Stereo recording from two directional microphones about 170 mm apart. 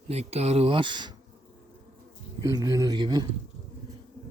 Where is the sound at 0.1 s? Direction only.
40° right (ahead or behind).